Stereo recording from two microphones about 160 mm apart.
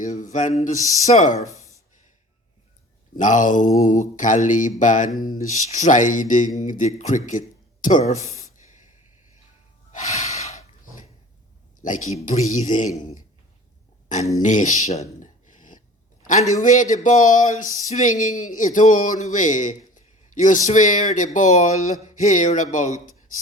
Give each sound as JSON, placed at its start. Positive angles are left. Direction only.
{"t": 0.0, "sound": "mantra", "side_deg": 50}
{"t": 1.5, "sound": "a sound", "side_deg": -20}
{"t": 3.2, "sound": "mantra", "side_deg": 50}
{"t": 7.3, "sound": "a sound", "side_deg": 50}
{"t": 9.9, "sound": "snort", "side_deg": 45}
{"t": 11.8, "sound": "mantra", "side_deg": 55}
{"t": 14.4, "sound": "mantra", "side_deg": 50}
{"t": 15.2, "sound": "a sound", "side_deg": 55}
{"t": 16.2, "sound": "mantra", "side_deg": 50}